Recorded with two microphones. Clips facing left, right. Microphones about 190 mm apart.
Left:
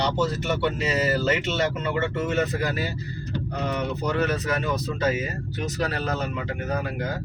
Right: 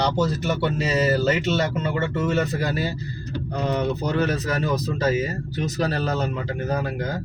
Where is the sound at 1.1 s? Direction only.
35° right (ahead or behind).